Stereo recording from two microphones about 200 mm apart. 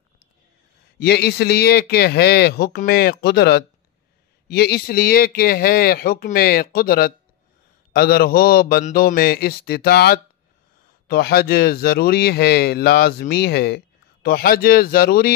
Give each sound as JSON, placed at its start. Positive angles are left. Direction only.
{"t": 0.9, "sound": "speech", "side_deg": 55}